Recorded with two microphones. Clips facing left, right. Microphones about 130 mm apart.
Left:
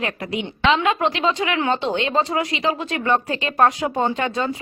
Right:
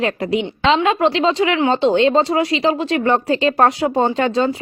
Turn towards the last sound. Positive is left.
turn(degrees=-30)  # may be behind; listen again after turning